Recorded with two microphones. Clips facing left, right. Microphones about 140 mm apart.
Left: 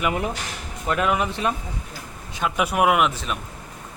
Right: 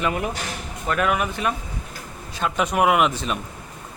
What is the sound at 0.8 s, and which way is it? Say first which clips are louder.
Speech: even; 20° left (ahead or behind).